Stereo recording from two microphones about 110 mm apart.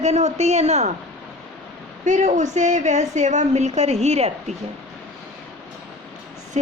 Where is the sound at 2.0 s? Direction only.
90° right.